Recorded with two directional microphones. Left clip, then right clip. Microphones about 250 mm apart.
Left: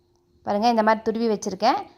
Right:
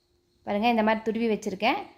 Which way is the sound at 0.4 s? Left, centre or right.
Left.